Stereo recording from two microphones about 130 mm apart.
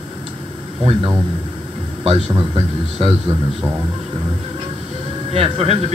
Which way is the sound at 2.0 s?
45° right (ahead or behind).